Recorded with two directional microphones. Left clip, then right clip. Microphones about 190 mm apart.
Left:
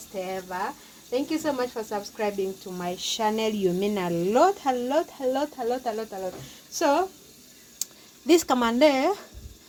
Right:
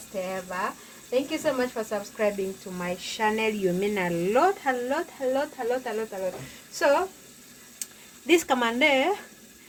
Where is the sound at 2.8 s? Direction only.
45° left (ahead or behind).